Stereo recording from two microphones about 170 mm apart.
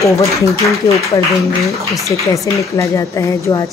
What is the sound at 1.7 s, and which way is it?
Speech, centre (ahead or behind).